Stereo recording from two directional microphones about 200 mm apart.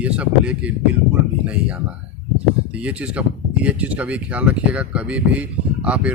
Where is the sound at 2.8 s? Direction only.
5° right (ahead or behind).